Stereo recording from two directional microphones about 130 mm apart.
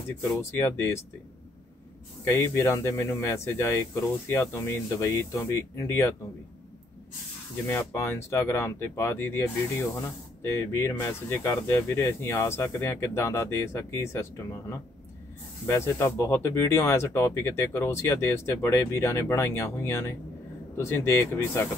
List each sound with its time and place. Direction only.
0.4 s speech: 20° left (ahead or behind)
2.2 s speech: 20° left (ahead or behind)
7.6 s speech: 15° left (ahead or behind)